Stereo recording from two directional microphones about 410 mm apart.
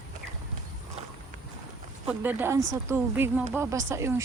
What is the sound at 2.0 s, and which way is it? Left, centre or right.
Speech, centre.